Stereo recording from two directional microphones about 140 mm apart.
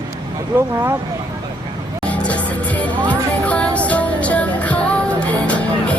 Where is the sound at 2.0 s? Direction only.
10° left (ahead or behind).